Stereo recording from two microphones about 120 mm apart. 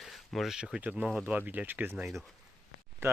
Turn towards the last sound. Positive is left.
turn(degrees=-20)  # may be behind; listen again after turning